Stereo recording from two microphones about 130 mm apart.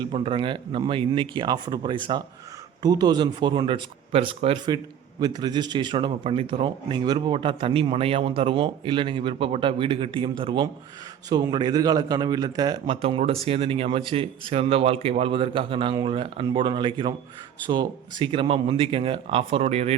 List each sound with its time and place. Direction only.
0.0 s a man's voice: 45° right (ahead or behind)
13.0 s a man's voice: 50° right (ahead or behind)